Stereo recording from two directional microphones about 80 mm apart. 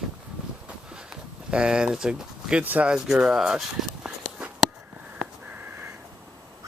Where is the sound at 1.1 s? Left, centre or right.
Centre.